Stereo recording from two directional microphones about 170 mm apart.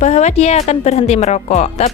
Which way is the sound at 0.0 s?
45° left (ahead or behind).